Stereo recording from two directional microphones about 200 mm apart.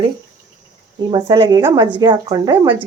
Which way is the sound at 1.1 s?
25° right (ahead or behind).